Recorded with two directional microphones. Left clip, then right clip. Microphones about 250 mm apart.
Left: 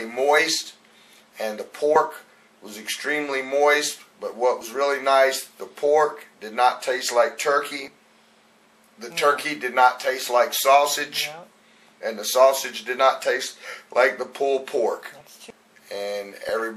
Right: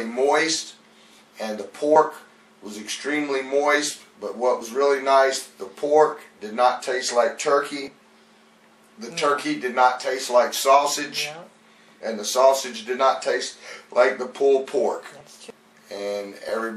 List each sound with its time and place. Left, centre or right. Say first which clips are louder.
0.0 s speech: left 1 dB; centre
9.0 s speech: left 2 dB; centre
15.9 s speech: left 2 dB; right
16.4 s speech: left 2 dB; centre